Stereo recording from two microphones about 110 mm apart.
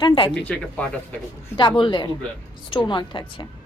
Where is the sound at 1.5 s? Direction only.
45° left (ahead or behind).